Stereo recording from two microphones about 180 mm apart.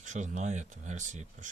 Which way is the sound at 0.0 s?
45° right (ahead or behind).